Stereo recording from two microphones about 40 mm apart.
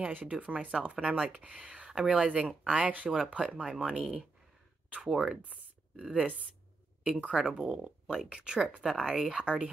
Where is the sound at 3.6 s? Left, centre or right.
Centre.